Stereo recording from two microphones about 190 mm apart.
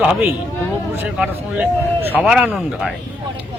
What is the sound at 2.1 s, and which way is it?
Speech, 5° right (ahead or behind).